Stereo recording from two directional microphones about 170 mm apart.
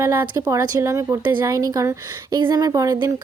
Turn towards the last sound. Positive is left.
turn(degrees=-20)  # may be behind; listen again after turning